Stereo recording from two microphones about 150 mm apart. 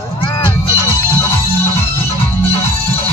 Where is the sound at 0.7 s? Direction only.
20° right (ahead or behind).